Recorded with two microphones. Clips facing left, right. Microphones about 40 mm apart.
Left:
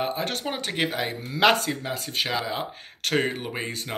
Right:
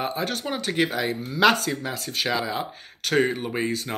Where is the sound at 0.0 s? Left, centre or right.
Left.